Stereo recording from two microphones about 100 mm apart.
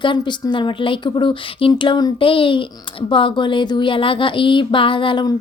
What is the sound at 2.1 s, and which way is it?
A woman's voice, 60° left (ahead or behind).